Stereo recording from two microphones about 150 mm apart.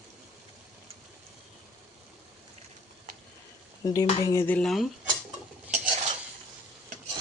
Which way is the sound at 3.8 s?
25° left (ahead or behind).